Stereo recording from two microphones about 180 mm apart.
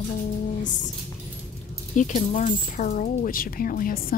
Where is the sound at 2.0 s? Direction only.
45° left (ahead or behind).